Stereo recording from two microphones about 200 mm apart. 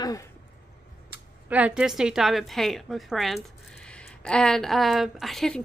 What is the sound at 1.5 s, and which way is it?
A woman's voice, 5° right (ahead or behind).